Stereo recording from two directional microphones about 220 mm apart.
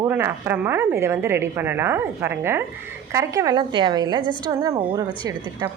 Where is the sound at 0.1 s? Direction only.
10° right (ahead or behind).